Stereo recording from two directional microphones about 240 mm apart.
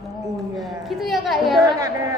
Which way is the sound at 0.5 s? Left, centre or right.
Centre.